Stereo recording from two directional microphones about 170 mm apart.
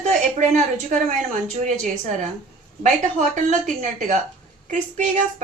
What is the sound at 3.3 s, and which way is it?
Speech, 45° right (ahead or behind).